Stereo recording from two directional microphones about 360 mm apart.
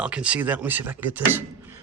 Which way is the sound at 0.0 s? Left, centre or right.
Centre.